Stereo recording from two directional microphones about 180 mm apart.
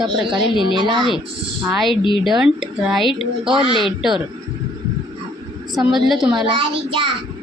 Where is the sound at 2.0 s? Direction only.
25° left (ahead or behind).